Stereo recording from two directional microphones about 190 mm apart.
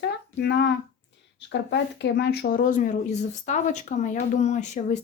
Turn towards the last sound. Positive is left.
turn(degrees=40)  # may be behind; listen again after turning